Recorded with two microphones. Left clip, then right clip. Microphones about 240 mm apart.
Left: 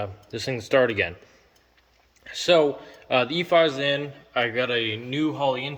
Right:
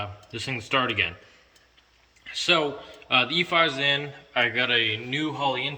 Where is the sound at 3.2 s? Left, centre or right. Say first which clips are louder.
Left 3 dB; centre.